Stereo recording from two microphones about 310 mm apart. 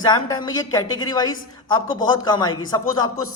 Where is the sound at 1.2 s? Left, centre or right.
Left.